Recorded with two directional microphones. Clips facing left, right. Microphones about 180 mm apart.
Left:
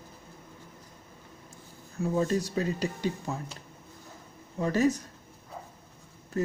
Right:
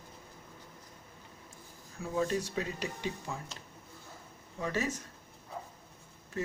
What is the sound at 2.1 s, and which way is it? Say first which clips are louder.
Speech: left 3 dB; 40° left (ahead or behind).